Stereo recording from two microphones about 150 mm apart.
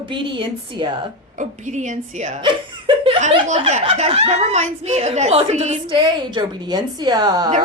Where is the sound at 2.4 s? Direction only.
35° right (ahead or behind).